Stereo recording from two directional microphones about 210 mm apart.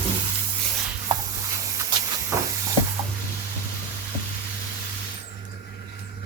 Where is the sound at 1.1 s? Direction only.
20° right (ahead or behind).